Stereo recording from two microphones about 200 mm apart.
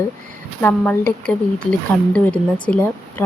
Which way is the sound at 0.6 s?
5° left (ahead or behind).